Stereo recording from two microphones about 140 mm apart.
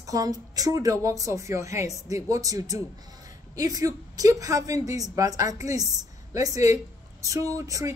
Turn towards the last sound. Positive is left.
turn(degrees=-25)  # may be behind; listen again after turning